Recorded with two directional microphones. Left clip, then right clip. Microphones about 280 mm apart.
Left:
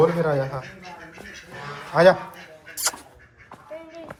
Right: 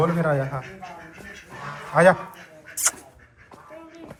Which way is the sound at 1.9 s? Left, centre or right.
Centre.